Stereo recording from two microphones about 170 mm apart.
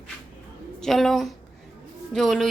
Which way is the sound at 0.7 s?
Centre (ahead or behind).